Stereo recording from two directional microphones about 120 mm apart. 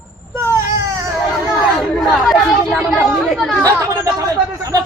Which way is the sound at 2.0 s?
Centre (ahead or behind).